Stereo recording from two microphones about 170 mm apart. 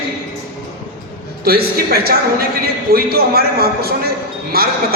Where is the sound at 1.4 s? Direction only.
65° right (ahead or behind).